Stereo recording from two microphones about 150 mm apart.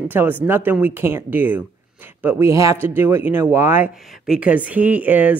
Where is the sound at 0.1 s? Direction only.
15° right (ahead or behind).